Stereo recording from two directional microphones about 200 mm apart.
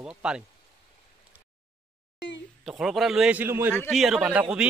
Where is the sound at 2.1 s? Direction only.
60° left (ahead or behind).